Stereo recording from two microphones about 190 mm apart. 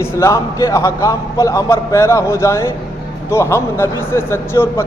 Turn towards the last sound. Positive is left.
turn(degrees=15)  # may be behind; listen again after turning